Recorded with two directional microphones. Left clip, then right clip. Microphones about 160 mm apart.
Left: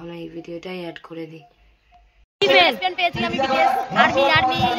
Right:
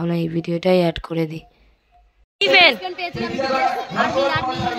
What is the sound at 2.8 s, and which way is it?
Speech, 15° left (ahead or behind).